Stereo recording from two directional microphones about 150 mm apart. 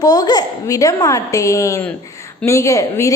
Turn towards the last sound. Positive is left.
turn(degrees=20)  # may be behind; listen again after turning